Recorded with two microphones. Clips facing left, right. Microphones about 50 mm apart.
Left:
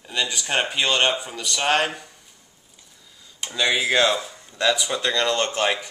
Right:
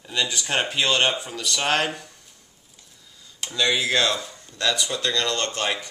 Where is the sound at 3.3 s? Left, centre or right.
Centre.